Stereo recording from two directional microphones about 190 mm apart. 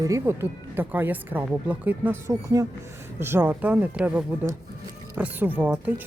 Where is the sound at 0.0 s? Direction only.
15° right (ahead or behind).